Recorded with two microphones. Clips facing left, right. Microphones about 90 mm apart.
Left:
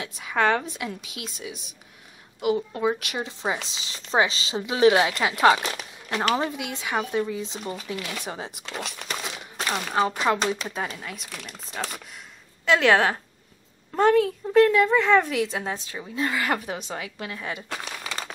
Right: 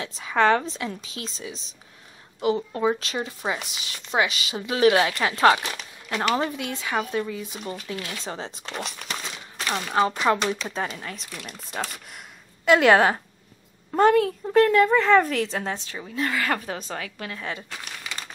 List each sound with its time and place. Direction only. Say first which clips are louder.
0.0 s a woman's voice: right 2 dB; 5° left (ahead or behind)
3.0 s a woman's voice: right 1 dB; 15° left (ahead or behind)
3.6 s a woman's voice: right 1 dB; 30° left (ahead or behind)
8.7 s speech: even; centre (ahead or behind)
9.6 s a sound: even; 15° left (ahead or behind)
9.8 s a woman's voice: right 2 dB; centre (ahead or behind)
16.2 s a woman's voice: even; 20° left (ahead or behind)